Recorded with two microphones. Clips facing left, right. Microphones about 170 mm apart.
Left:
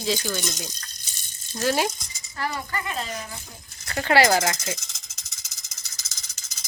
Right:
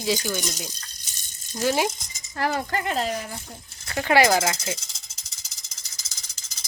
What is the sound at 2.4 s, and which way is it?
Speech, 50° right (ahead or behind).